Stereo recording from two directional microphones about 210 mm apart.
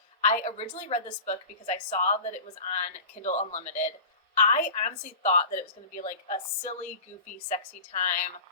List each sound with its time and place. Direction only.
0.2 s a woman's voice: 35° left (ahead or behind)
7.9 s a woman's voice: 35° left (ahead or behind)